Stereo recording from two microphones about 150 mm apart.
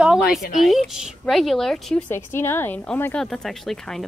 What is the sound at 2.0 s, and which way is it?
A woman's voice, 15° left (ahead or behind).